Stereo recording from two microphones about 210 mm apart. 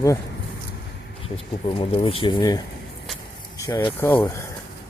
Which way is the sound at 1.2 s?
25° left (ahead or behind).